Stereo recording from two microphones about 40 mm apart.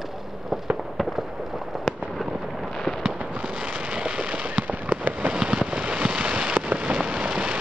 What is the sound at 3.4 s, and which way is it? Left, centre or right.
Fireworks, right.